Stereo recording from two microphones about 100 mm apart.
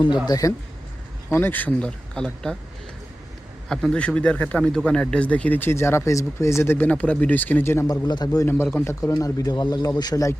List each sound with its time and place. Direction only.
0.3 s speech: 35° left (ahead or behind)
1.3 s speech: 20° left (ahead or behind); by 2.6 s 5° left (ahead or behind)
3.7 s speech: 5° left (ahead or behind); by 7.9 s 25° left (ahead or behind)
7.9 s speech: 45° left (ahead or behind)
8.7 s speech: 25° left (ahead or behind)